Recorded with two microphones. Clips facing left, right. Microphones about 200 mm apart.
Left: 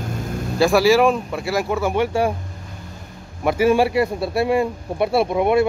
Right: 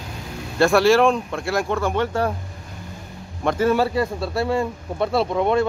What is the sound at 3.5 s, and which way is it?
A man's voice, 10° left (ahead or behind).